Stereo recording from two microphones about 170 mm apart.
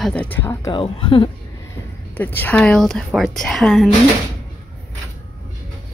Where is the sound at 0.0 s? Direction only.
10° left (ahead or behind).